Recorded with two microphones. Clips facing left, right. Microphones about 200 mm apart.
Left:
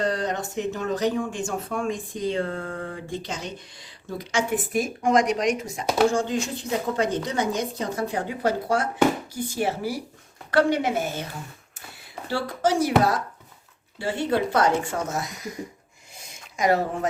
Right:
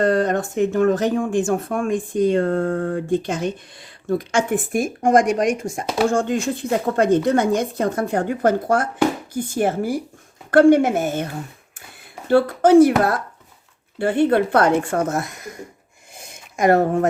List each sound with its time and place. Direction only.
0.0 s speech: 55° right (ahead or behind)
12.3 s speech: 55° right (ahead or behind)
16.1 s a sound: 50° right (ahead or behind)